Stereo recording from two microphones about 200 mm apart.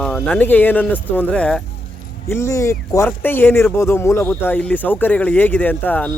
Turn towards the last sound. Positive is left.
turn(degrees=10)  # may be behind; listen again after turning